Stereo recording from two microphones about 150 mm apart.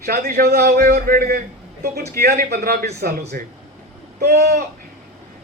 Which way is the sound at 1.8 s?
90° right.